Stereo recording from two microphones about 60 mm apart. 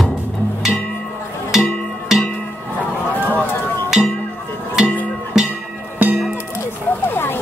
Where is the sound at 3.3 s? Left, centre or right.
Left.